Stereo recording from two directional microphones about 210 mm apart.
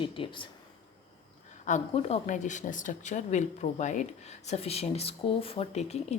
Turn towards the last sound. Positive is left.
turn(degrees=30)  # may be behind; listen again after turning